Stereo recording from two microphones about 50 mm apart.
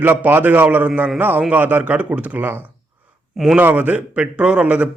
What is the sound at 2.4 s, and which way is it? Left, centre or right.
Speech, right.